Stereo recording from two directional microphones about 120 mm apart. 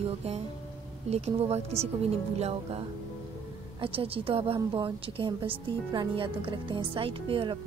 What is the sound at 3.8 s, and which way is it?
A woman's voice, 50° right (ahead or behind).